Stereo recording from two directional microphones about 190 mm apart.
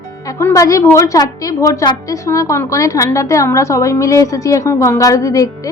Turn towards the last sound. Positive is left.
turn(degrees=15)  # may be behind; listen again after turning